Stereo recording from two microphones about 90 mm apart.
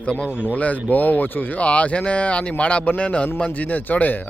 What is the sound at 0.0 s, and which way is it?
Speech, 10° left (ahead or behind).